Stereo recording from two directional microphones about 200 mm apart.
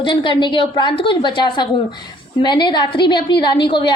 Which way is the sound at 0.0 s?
25° left (ahead or behind).